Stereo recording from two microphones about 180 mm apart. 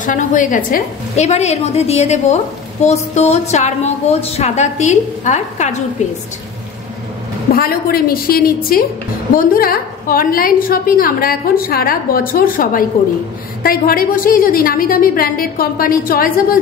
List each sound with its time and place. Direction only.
0.0 s a woman's voice: 45° left (ahead or behind)
7.5 s a woman's voice: 55° left (ahead or behind)